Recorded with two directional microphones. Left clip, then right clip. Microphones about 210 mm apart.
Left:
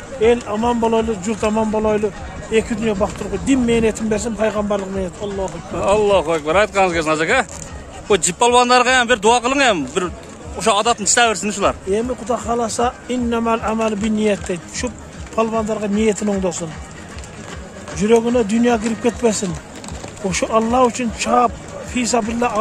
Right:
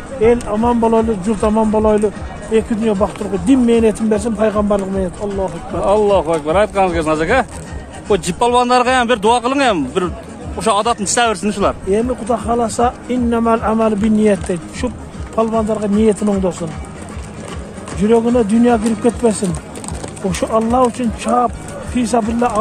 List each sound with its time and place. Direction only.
0.5 s speech: centre (ahead or behind)
5.4 s speech: 10° left (ahead or behind)
17.9 s speech: 10° left (ahead or behind)